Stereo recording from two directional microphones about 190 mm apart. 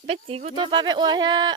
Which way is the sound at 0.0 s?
30° right (ahead or behind).